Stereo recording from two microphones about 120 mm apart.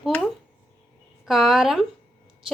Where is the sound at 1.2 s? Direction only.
5° right (ahead or behind).